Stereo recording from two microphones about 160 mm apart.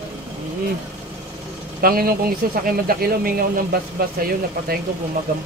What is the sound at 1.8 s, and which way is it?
Speech, 65° right (ahead or behind).